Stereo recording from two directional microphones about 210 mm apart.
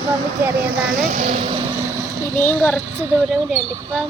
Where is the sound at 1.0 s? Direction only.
35° right (ahead or behind).